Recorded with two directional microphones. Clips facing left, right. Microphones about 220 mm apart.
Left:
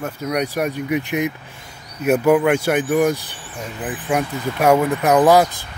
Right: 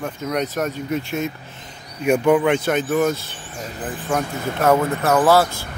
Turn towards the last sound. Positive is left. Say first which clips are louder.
# left 2 dB
turn(degrees=15)  # may be behind; listen again after turning